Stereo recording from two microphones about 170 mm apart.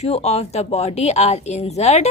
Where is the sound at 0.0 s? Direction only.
40° left (ahead or behind).